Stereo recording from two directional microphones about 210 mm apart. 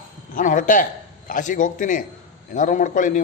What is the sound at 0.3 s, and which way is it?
A man's voice, 40° left (ahead or behind).